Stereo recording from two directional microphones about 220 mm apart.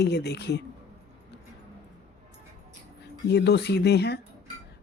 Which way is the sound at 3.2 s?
50° left (ahead or behind).